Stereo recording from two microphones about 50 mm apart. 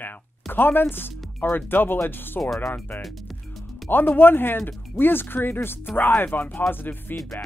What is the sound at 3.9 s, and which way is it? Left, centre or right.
Speech, left.